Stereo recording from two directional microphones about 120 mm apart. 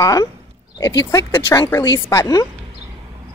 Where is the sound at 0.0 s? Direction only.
30° left (ahead or behind).